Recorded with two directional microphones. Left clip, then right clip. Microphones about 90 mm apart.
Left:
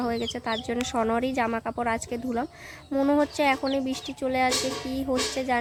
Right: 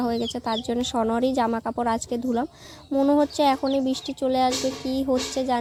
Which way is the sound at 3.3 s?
25° right (ahead or behind).